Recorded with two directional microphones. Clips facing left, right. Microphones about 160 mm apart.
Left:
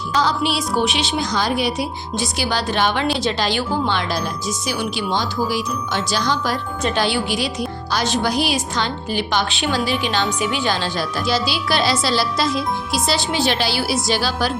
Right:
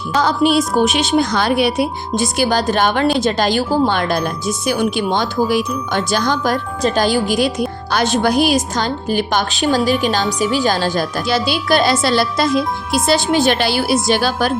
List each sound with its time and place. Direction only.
0.1 s a woman's voice: 50° right (ahead or behind)